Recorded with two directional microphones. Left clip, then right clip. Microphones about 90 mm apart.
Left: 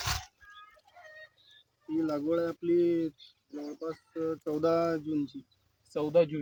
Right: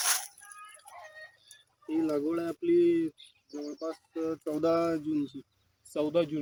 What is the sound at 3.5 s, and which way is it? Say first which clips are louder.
Speech: right 1 dB; 30° left (ahead or behind).